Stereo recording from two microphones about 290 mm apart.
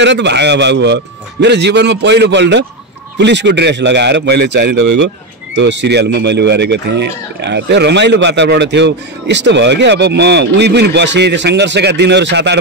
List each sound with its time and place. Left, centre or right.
0.0 s a man's voice: right